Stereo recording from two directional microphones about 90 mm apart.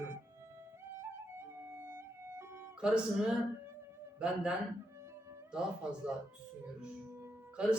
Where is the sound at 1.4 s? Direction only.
30° right (ahead or behind).